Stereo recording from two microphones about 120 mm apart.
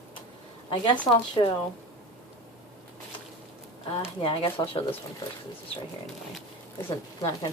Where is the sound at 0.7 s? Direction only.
45° left (ahead or behind).